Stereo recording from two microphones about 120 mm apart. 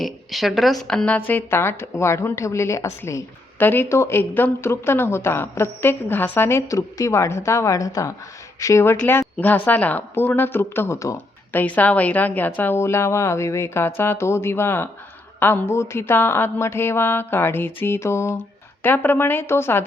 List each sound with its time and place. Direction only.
0.0 s a woman's voice: centre (ahead or behind); by 11.2 s 25° left (ahead or behind)
11.5 s a woman's voice: 15° left (ahead or behind)